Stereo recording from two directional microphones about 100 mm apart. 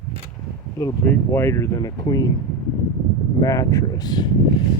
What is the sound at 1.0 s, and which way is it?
Speech, 20° left (ahead or behind).